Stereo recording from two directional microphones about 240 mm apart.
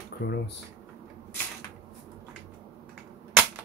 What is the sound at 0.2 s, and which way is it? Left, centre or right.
Speech, left.